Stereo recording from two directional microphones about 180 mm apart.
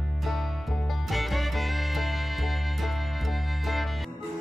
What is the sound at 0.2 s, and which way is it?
Music, centre (ahead or behind).